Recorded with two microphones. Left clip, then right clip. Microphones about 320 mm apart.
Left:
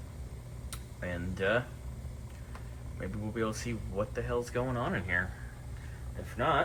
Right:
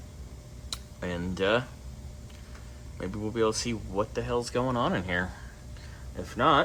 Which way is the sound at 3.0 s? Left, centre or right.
Centre.